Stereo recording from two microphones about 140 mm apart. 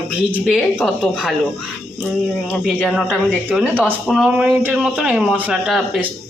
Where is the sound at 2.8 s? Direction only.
Centre (ahead or behind).